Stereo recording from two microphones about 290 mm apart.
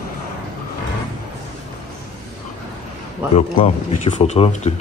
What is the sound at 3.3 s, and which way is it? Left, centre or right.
Speech, left.